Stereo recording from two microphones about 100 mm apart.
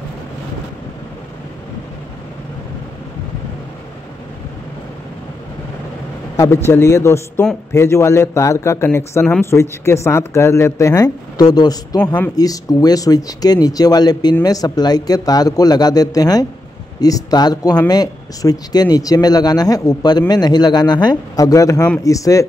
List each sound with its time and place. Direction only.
6.3 s a man's voice: 30° left (ahead or behind)